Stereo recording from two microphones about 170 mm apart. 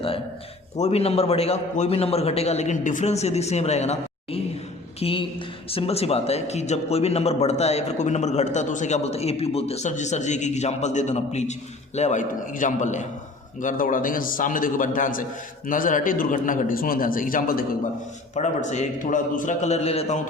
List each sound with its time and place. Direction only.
0.8 s a man's voice: 40° left (ahead or behind); by 17.7 s 60° left (ahead or behind)
18.3 s a man's voice: 45° left (ahead or behind)